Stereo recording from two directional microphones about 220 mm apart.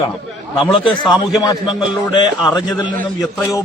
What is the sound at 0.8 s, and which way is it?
Speech, centre (ahead or behind).